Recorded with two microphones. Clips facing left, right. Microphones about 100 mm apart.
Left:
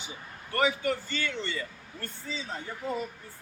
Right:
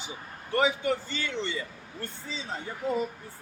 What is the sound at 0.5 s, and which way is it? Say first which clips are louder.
A man's voice: right 2 dB; 20° right (ahead or behind).